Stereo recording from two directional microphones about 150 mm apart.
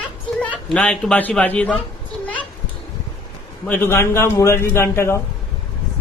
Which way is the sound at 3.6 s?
10° left (ahead or behind).